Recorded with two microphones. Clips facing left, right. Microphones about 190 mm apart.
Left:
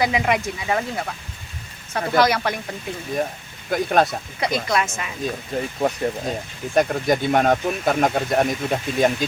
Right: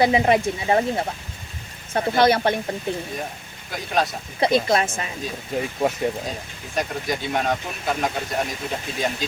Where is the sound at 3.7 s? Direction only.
55° left (ahead or behind).